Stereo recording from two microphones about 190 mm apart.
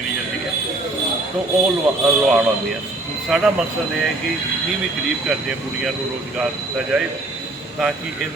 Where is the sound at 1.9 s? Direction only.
10° right (ahead or behind).